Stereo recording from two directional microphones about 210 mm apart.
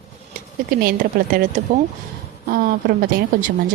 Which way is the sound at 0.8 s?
45° right (ahead or behind).